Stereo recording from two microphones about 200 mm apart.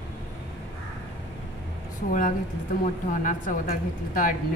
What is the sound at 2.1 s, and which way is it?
A woman's voice, 45° left (ahead or behind).